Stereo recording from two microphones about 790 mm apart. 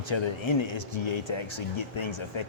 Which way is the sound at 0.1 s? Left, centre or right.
Left.